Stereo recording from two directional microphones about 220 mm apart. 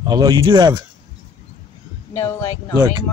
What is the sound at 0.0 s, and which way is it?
Speech, 20° right (ahead or behind).